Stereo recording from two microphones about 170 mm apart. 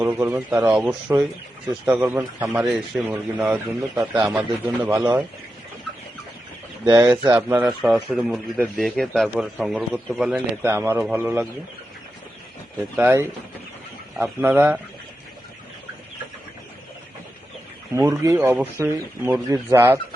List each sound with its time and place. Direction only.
0.0 s speech: 15° right (ahead or behind)
6.8 s speech: 25° right (ahead or behind)
7.3 s a man's voice: 10° right (ahead or behind)
13.0 s speech: 15° right (ahead or behind)
14.4 s speech: 10° right (ahead or behind)
17.9 s speech: 20° right (ahead or behind)